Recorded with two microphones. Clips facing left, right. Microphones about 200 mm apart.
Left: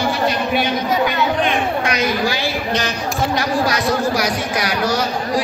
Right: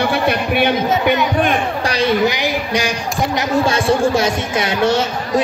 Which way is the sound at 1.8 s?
30° right (ahead or behind).